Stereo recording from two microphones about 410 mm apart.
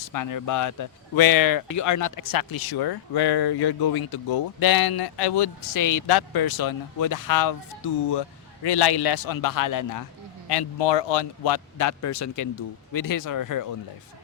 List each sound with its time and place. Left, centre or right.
0.0 s speech: left
5.7 s speech: left
7.8 s speech: left
10.5 s speech: left
12.9 s speech: left